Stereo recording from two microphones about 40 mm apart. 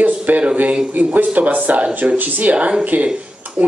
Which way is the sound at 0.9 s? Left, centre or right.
Right.